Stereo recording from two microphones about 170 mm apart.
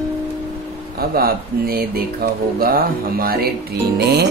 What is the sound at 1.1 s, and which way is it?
Music, 60° right (ahead or behind).